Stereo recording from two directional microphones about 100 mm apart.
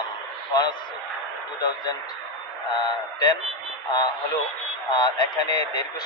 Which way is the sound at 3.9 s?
40° left (ahead or behind).